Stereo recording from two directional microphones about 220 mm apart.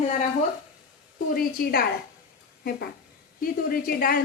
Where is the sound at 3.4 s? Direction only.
40° left (ahead or behind).